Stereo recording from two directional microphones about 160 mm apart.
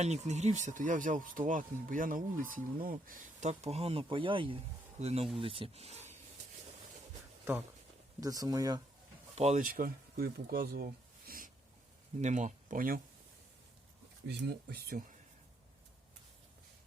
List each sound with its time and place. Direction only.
0.0 s speech: 45° right (ahead or behind)
8.2 s speech: 20° right (ahead or behind)
9.3 s speech: 45° right (ahead or behind)
9.6 s speech: 65° right (ahead or behind)
12.2 s speech: 50° right (ahead or behind)
14.3 s speech: 70° right (ahead or behind)